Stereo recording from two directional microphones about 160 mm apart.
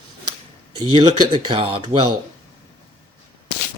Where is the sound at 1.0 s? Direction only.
30° right (ahead or behind).